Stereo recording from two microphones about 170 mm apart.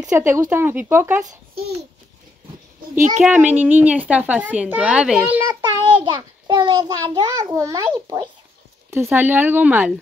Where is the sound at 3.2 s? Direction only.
10° right (ahead or behind).